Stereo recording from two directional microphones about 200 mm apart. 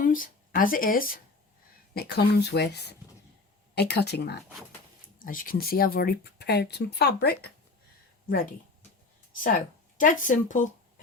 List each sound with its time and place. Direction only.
0.0 s speech: 45° left (ahead or behind)
5.2 s speech: 45° left (ahead or behind)
10.0 s speech: 40° left (ahead or behind)